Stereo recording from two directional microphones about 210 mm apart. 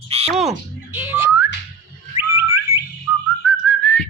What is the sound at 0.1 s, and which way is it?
Squawk, 30° right (ahead or behind).